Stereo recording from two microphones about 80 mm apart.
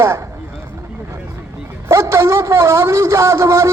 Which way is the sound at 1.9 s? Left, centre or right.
Right.